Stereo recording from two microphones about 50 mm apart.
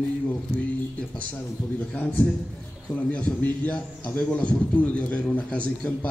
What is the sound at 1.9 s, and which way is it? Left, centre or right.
A man's voice, left.